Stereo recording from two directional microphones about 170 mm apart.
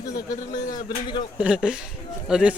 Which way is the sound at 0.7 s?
25° left (ahead or behind).